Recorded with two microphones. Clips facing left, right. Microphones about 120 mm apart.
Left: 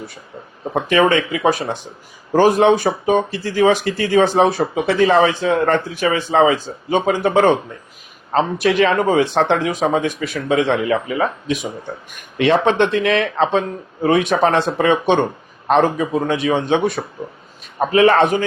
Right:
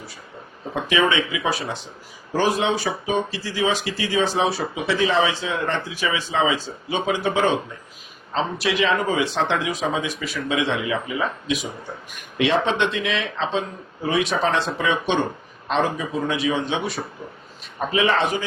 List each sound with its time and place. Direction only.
0.7 s speech: 55° left (ahead or behind)